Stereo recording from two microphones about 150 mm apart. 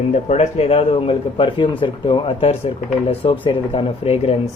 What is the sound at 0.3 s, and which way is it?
A man's voice, 45° left (ahead or behind).